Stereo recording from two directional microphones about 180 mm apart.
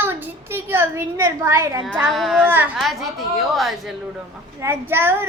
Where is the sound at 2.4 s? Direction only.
10° right (ahead or behind).